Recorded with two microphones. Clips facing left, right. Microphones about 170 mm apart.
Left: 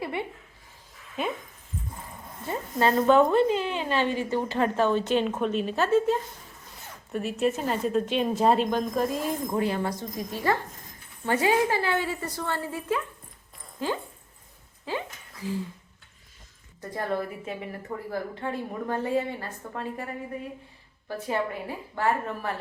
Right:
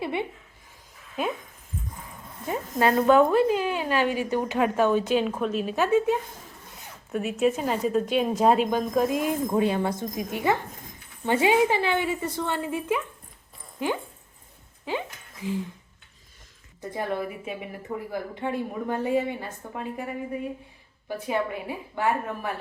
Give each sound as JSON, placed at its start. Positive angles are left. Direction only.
{"t": 0.0, "sound": "a sound", "side_deg": -20}
{"t": 1.2, "sound": "a woman's voice", "side_deg": -5}
{"t": 2.5, "sound": "a woman's voice", "side_deg": -10}
{"t": 7.1, "sound": "a woman's voice", "side_deg": 0}
{"t": 16.9, "sound": "a woman's voice", "side_deg": -15}
{"t": 21.1, "sound": "a woman's voice", "side_deg": -15}